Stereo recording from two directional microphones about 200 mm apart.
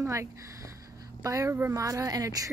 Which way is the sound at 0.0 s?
15° right (ahead or behind).